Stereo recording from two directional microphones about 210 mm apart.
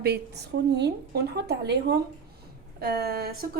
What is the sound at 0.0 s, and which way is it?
A woman's voice, 50° right (ahead or behind).